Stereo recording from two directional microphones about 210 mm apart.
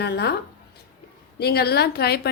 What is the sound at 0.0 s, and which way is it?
Speech, 50° left (ahead or behind).